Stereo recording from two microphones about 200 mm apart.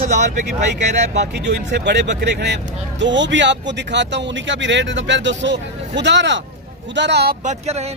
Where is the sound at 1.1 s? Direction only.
60° right (ahead or behind).